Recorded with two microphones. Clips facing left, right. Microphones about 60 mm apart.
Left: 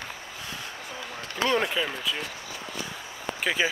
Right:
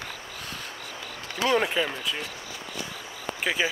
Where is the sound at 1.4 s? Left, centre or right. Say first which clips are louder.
Right 2 dB; centre.